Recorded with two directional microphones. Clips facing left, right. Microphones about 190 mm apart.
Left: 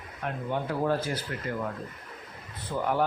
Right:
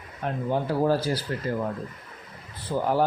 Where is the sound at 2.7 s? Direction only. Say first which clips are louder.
Right 4 dB; 30° right (ahead or behind).